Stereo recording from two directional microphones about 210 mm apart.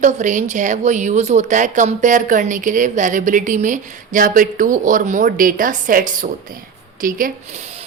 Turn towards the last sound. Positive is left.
turn(degrees=-30)  # may be behind; listen again after turning